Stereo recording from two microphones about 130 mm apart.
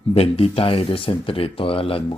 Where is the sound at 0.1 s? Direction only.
50° left (ahead or behind).